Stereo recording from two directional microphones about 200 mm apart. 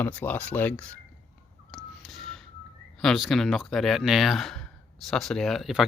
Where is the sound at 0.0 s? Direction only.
10° left (ahead or behind).